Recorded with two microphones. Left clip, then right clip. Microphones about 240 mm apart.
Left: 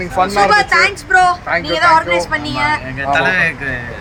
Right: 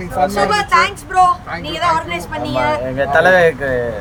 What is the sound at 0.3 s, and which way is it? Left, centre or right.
Speech, centre.